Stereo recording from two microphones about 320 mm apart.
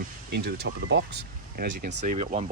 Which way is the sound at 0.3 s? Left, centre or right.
Right.